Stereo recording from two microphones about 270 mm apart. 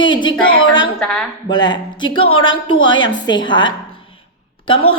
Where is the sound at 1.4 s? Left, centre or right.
Centre.